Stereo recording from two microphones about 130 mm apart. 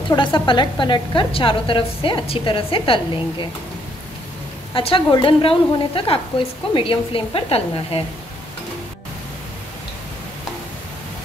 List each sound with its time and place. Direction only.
0.1 s a woman's voice: 40° left (ahead or behind)
4.7 s a woman's voice: 45° left (ahead or behind)